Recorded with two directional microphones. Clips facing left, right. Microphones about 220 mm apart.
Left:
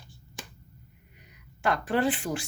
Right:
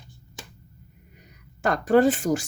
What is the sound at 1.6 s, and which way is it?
Speech, 45° right (ahead or behind).